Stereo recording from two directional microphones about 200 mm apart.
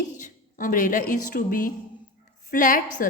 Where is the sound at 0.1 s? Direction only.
40° left (ahead or behind).